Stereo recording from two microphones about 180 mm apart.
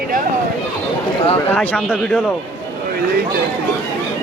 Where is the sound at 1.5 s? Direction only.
5° left (ahead or behind).